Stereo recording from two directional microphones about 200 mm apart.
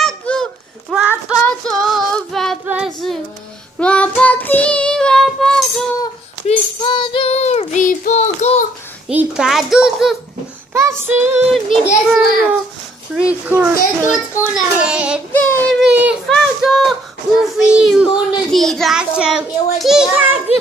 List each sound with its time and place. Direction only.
0.0 s a sound: 5° left (ahead or behind)
1.4 s child singing: 5° left (ahead or behind)
2.6 s female singing: 5° right (ahead or behind)
3.8 s child singing: 5° left (ahead or behind)
6.4 s child singing: 25° left (ahead or behind)
9.1 s a sound: 5° right (ahead or behind)
10.7 s child singing: 15° right (ahead or behind)
11.5 s a child's voice: centre (ahead or behind)
13.1 s a child's voice: 5° right (ahead or behind)
15.3 s child singing: 10° left (ahead or behind)
15.8 s a sound: 5° right (ahead or behind)
17.4 s a child's voice: 5° right (ahead or behind)